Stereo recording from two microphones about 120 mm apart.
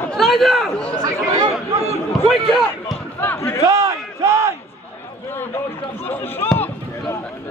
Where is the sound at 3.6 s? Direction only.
25° right (ahead or behind).